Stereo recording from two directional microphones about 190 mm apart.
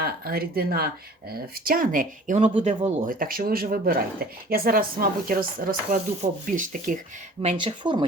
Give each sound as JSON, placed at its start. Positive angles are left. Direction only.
{"t": 0.0, "sound": "speech", "side_deg": -55}
{"t": 3.1, "sound": "speech", "side_deg": -50}
{"t": 7.4, "sound": "speech", "side_deg": -25}